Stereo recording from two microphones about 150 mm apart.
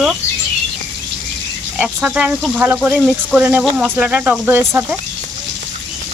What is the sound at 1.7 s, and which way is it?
Speech, 5° right (ahead or behind).